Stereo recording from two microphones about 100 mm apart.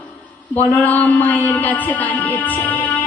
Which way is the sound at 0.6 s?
15° left (ahead or behind).